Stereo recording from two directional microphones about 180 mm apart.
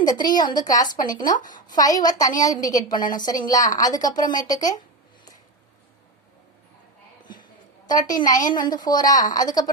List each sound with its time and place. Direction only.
0.0 s a woman's voice: 20° left (ahead or behind)
1.4 s a woman's voice: 45° left (ahead or behind)
1.7 s a woman's voice: 20° left (ahead or behind)
7.9 s a woman's voice: 20° left (ahead or behind)